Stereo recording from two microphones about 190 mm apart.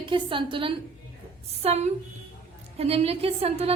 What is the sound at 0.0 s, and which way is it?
Speech, 25° right (ahead or behind).